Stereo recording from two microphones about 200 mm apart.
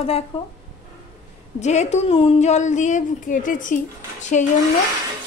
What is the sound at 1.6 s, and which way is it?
A woman's voice, 35° left (ahead or behind).